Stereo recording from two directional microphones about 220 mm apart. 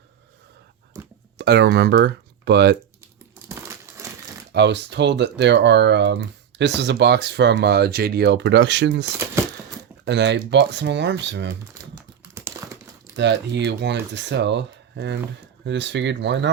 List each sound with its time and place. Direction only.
0.9 s a sound: 15° right (ahead or behind)
1.4 s speech: 50° right (ahead or behind)
4.0 s crumpling: 15° right (ahead or behind)
4.5 s speech: 50° right (ahead or behind)
9.1 s speech: 10° right (ahead or behind)
10.1 s speech: 55° right (ahead or behind)
12.4 s crumpling: 15° right (ahead or behind)
13.1 s speech: 50° right (ahead or behind)